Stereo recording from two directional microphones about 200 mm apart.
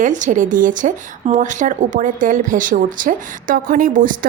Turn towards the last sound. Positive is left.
turn(degrees=-40)  # may be behind; listen again after turning